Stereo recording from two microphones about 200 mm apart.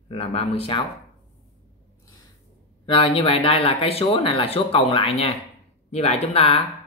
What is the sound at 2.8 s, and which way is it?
Speech, 30° left (ahead or behind).